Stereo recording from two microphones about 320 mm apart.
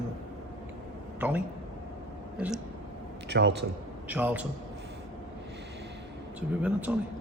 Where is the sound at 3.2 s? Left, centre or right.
Right.